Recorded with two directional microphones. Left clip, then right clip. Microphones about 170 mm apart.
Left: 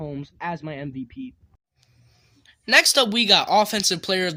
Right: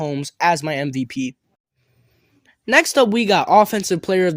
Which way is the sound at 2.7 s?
40° right (ahead or behind).